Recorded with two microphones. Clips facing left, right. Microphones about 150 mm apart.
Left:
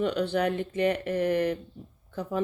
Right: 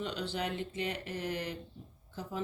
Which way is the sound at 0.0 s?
55° left (ahead or behind).